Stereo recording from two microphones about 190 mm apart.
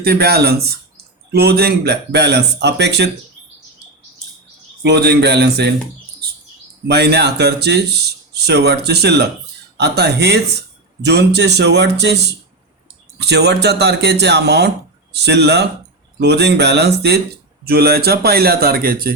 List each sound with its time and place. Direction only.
0.0 s speech: 55° right (ahead or behind)
4.8 s speech: 60° right (ahead or behind)
6.8 s speech: 60° right (ahead or behind)